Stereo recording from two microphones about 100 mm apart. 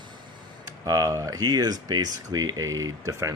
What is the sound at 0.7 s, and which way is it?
Speech, 40° right (ahead or behind).